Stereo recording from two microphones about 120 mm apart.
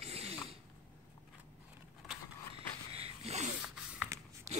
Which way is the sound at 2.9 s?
55° right (ahead or behind).